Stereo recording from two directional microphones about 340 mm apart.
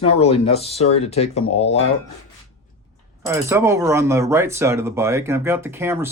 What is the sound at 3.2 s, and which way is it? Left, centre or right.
Speech, centre.